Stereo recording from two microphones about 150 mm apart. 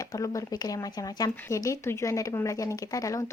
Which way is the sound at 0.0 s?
20° left (ahead or behind).